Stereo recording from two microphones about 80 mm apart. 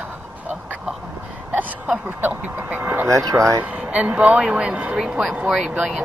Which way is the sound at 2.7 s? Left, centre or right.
Right.